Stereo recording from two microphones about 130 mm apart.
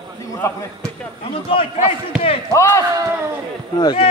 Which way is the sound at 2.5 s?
20° left (ahead or behind).